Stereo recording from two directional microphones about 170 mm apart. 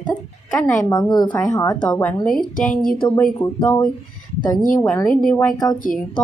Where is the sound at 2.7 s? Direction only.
55° left (ahead or behind).